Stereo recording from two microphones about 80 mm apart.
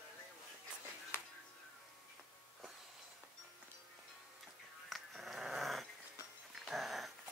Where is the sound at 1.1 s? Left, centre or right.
Left.